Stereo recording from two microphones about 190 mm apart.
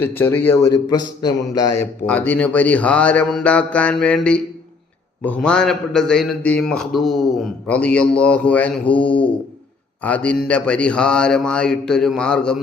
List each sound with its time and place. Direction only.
0.0 s a man's voice: 10° left (ahead or behind)